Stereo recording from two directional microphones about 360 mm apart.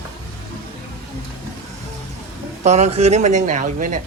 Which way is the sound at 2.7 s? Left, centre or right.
Centre.